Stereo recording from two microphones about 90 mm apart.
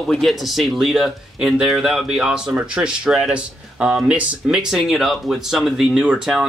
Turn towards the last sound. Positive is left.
turn(degrees=-5)  # may be behind; listen again after turning